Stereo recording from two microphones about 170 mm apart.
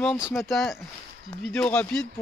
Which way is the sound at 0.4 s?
Centre (ahead or behind).